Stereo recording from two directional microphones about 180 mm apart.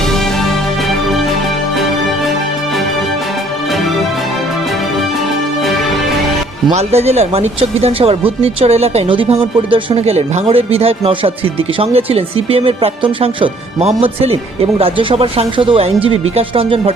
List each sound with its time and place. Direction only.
6.7 s speech: 35° right (ahead or behind)